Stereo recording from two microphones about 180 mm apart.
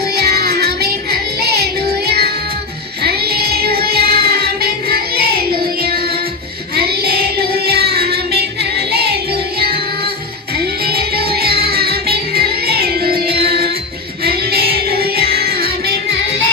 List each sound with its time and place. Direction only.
0.2 s music: 60° right (ahead or behind)
6.7 s child singing: 60° right (ahead or behind)
8.9 s music: 65° right (ahead or behind)
10.6 s music: 60° right (ahead or behind)